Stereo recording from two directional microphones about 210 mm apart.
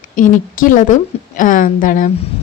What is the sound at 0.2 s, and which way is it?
A woman's voice, 40° left (ahead or behind).